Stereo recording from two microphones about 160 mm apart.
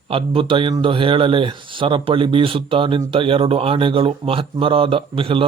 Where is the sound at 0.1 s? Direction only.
35° right (ahead or behind).